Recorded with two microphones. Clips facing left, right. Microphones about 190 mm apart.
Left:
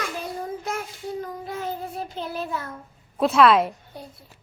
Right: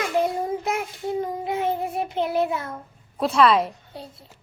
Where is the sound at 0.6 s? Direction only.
20° right (ahead or behind).